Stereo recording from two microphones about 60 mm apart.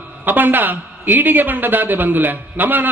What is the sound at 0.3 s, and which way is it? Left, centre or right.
A man's voice, right.